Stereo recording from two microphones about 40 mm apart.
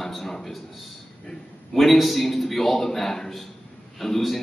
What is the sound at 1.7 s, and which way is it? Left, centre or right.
A man's voice, centre.